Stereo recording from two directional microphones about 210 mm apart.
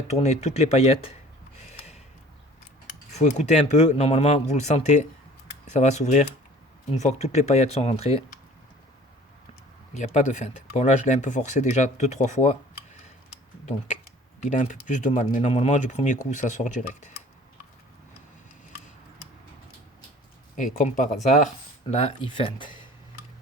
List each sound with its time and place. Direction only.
0.1 s speech: 30° left (ahead or behind)
3.1 s speech: 35° left (ahead or behind)
9.9 s speech: 35° left (ahead or behind)
14.4 s speech: 35° left (ahead or behind)
20.6 s speech: 35° left (ahead or behind)